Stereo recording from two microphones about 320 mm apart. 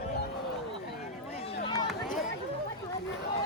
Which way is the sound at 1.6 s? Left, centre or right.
Centre.